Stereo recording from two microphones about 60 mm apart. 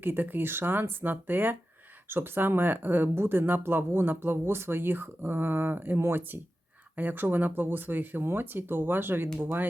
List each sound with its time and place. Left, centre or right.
0.0 s speech: right